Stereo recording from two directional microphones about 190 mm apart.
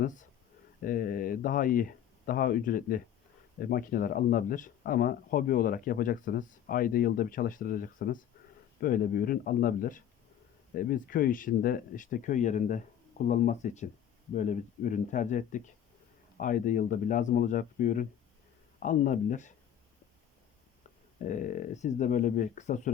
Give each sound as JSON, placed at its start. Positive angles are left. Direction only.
{"t": 0.0, "sound": "speech", "side_deg": 40}
{"t": 21.2, "sound": "speech", "side_deg": 40}